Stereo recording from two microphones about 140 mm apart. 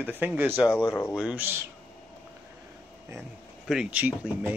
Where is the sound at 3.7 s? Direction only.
5° right (ahead or behind).